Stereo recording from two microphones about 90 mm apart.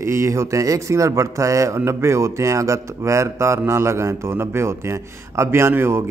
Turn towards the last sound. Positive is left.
turn(degrees=-30)  # may be behind; listen again after turning